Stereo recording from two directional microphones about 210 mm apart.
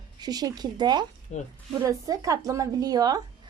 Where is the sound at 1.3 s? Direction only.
35° left (ahead or behind).